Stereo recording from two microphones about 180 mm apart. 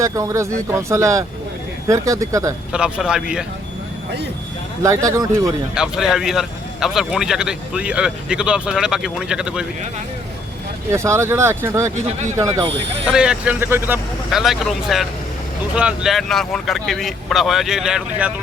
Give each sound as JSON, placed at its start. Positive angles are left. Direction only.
{"t": 0.0, "sound": "speech", "side_deg": -15}
{"t": 2.7, "sound": "speech", "side_deg": -5}
{"t": 4.8, "sound": "speech", "side_deg": -15}
{"t": 5.7, "sound": "speech", "side_deg": -5}
{"t": 10.9, "sound": "speech", "side_deg": -15}
{"t": 13.1, "sound": "speech", "side_deg": -5}
{"t": 14.3, "sound": "speech", "side_deg": 0}